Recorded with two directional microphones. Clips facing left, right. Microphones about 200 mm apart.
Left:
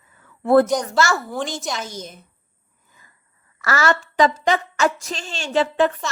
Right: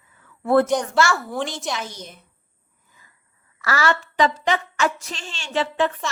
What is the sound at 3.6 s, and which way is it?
A woman's voice, 45° left (ahead or behind).